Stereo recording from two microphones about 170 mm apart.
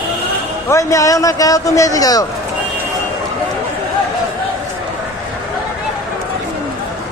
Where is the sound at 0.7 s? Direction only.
20° left (ahead or behind).